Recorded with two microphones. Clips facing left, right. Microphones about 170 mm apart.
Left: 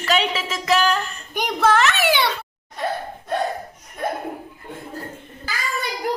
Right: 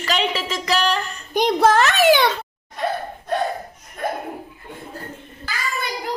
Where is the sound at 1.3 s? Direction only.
35° right (ahead or behind).